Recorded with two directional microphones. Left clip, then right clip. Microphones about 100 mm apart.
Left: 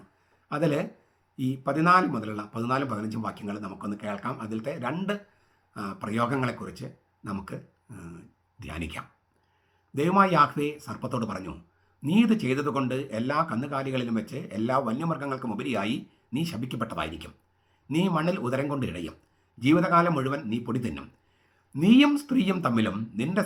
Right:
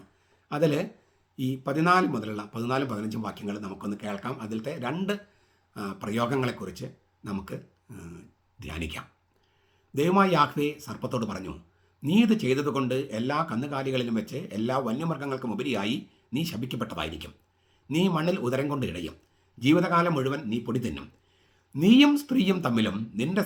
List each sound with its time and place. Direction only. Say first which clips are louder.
0.4 s speech: right 1 dB; 25° right (ahead or behind)